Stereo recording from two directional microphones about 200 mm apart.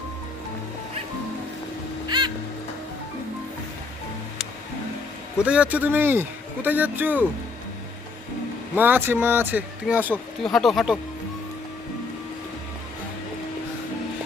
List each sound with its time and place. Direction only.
2.0 s crow: 20° right (ahead or behind)
5.4 s a man's voice: 5° right (ahead or behind)
8.7 s a man's voice: 10° right (ahead or behind)